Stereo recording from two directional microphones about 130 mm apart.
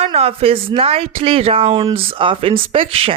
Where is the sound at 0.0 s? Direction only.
50° right (ahead or behind).